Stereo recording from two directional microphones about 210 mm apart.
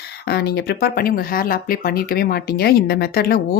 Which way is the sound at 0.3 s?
50° left (ahead or behind).